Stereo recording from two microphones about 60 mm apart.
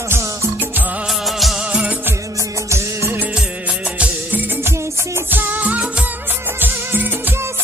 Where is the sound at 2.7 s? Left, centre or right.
Right.